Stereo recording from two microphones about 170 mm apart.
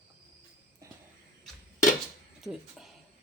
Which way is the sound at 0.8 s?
20° right (ahead or behind).